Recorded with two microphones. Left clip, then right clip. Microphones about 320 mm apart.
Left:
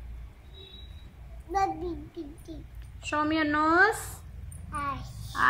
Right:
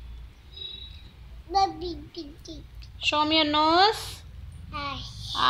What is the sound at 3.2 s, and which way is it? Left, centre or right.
Speech, centre.